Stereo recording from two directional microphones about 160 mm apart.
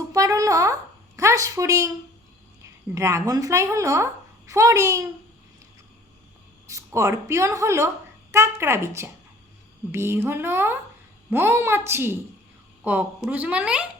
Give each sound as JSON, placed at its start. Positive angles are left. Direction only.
{"t": 0.1, "sound": "a sound", "side_deg": -20}
{"t": 2.9, "sound": "a woman's voice", "side_deg": -20}
{"t": 6.7, "sound": "a woman's voice", "side_deg": -20}